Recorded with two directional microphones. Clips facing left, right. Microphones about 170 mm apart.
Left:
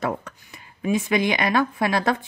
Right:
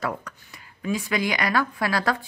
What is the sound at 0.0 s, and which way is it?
Speech, 25° left (ahead or behind).